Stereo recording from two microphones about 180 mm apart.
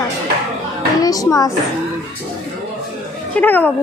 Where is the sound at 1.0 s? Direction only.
20° left (ahead or behind).